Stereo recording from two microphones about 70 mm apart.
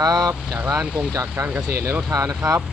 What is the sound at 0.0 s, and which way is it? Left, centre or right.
Speech, right.